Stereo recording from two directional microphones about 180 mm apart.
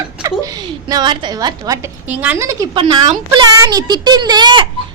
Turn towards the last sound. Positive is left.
turn(degrees=-25)  # may be behind; listen again after turning